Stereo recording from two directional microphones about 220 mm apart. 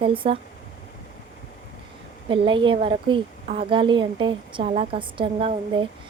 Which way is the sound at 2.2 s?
20° right (ahead or behind).